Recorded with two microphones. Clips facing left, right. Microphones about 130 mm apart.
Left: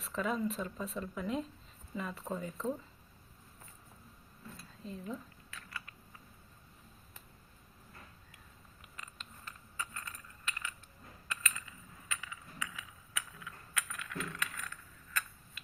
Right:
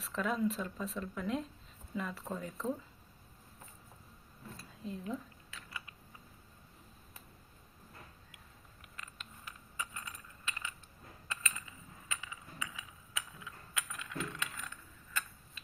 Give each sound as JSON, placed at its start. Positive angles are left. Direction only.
{"t": 0.0, "sound": "speech", "side_deg": 0}
{"t": 4.8, "sound": "speech", "side_deg": 0}
{"t": 8.8, "sound": "a sound", "side_deg": 0}